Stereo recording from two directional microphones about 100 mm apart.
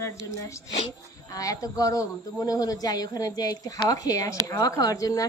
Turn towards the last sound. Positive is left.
turn(degrees=35)  # may be behind; listen again after turning